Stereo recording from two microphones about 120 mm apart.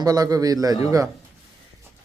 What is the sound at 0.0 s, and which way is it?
A man's voice, 30° right (ahead or behind).